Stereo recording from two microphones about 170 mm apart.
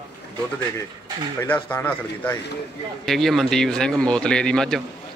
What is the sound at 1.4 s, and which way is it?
Speech, 15° left (ahead or behind).